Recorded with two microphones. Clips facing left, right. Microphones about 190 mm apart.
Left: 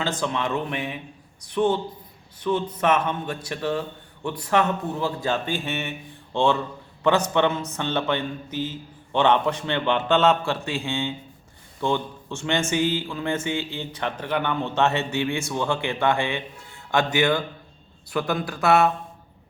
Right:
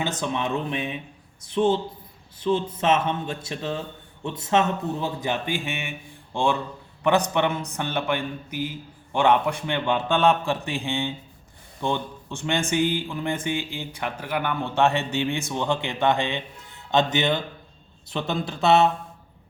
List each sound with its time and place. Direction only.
0.2 s a man's voice: 20° right (ahead or behind)